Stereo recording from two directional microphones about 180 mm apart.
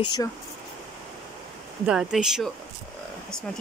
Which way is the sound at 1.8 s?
5° right (ahead or behind).